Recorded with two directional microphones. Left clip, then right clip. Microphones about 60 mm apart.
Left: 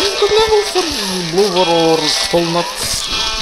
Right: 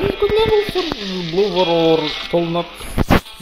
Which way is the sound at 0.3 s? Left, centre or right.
Left.